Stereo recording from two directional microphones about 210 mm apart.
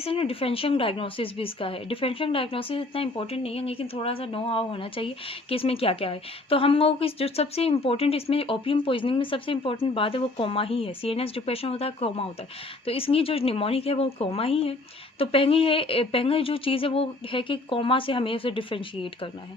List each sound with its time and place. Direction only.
0.0 s speech: 25° left (ahead or behind)